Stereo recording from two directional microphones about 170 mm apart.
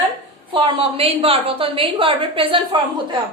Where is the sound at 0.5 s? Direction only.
30° right (ahead or behind).